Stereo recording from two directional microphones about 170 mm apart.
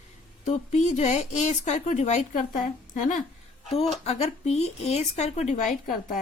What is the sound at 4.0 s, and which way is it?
A woman's voice, 35° left (ahead or behind).